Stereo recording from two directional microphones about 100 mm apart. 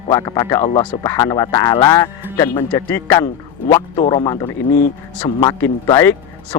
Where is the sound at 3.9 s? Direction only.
50° left (ahead or behind).